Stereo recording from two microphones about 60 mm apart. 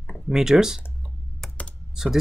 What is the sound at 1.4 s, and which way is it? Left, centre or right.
Computer keyboard, centre.